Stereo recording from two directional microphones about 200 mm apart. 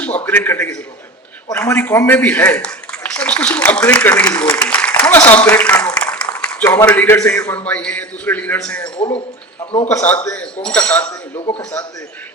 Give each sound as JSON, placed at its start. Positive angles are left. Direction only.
{"t": 0.3, "sound": "a man's voice", "side_deg": 10}
{"t": 9.0, "sound": "speech", "side_deg": 25}
{"t": 9.9, "sound": "speech", "side_deg": 10}
{"t": 11.3, "sound": "speech", "side_deg": 25}